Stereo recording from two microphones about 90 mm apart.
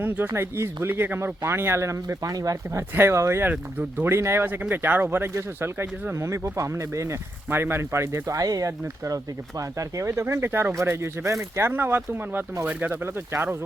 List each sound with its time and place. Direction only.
0.0 s speech: 20° right (ahead or behind); by 2.8 s 40° right (ahead or behind)
2.9 s speech: 30° right (ahead or behind)